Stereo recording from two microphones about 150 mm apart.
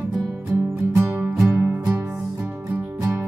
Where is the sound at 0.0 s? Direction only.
Centre (ahead or behind).